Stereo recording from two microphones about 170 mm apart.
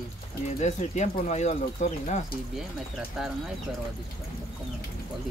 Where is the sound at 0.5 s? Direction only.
45° left (ahead or behind).